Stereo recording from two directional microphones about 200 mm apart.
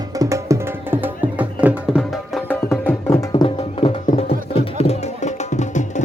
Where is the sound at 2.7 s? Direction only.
Centre (ahead or behind).